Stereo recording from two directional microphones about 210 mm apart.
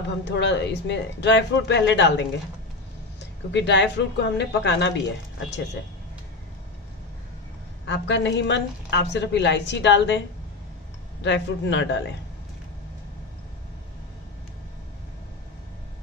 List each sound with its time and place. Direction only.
0.2 s a woman's voice: 55° left (ahead or behind)
3.5 s a woman's voice: 55° left (ahead or behind)
7.8 s a woman's voice: 60° left (ahead or behind)
11.2 s a woman's voice: 60° left (ahead or behind)